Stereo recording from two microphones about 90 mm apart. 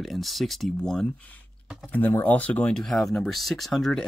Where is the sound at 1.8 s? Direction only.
20° left (ahead or behind).